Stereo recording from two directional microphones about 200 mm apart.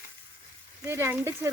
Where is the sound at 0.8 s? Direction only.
10° right (ahead or behind).